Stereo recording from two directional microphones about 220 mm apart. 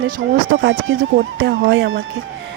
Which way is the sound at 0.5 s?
65° right (ahead or behind).